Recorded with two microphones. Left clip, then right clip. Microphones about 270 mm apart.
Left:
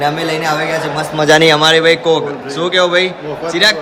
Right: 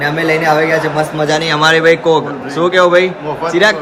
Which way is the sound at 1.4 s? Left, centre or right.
Centre.